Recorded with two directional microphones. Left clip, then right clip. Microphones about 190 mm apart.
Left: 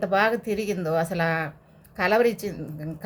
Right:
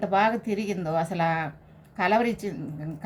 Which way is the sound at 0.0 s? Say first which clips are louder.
Left 1 dB; 45° left (ahead or behind).